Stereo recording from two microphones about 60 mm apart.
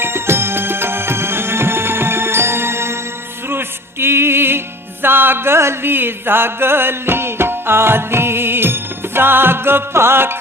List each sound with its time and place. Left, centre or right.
0.0 s music: right